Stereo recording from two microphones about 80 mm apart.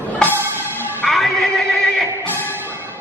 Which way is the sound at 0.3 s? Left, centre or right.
Right.